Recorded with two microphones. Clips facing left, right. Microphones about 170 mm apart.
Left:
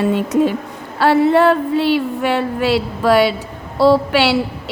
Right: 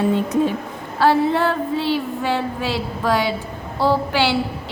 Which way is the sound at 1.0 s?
65° left (ahead or behind).